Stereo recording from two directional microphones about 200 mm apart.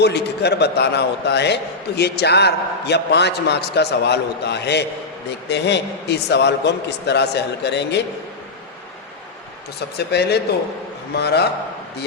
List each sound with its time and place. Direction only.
0.0 s a man's voice: 55° left (ahead or behind)
10.1 s a man's voice: 55° left (ahead or behind)